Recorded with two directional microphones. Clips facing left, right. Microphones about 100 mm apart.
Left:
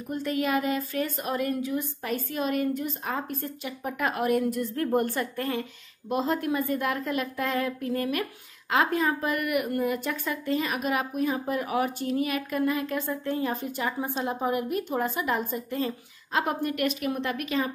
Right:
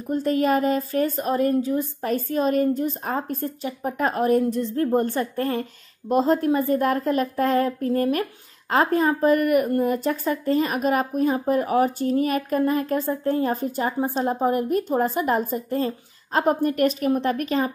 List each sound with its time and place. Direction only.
0.1 s a woman's voice: 35° right (ahead or behind)